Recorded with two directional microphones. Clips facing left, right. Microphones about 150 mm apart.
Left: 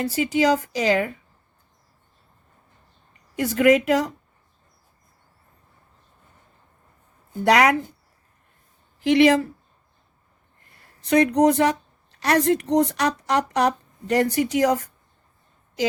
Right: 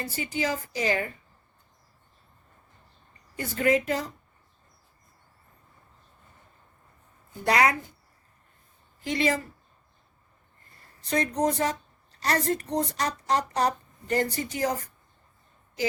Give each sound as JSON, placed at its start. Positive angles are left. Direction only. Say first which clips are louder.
{"t": 0.0, "sound": "a woman's voice", "louder": "left 10 dB", "side_deg": 90}
{"t": 3.1, "sound": "a woman's voice", "louder": "left 10 dB", "side_deg": 80}
{"t": 7.4, "sound": "a woman's voice", "louder": "left 6 dB", "side_deg": 80}
{"t": 9.0, "sound": "speech", "louder": "left 10 dB", "side_deg": 80}
{"t": 11.1, "sound": "a woman's voice", "louder": "left 9 dB", "side_deg": 70}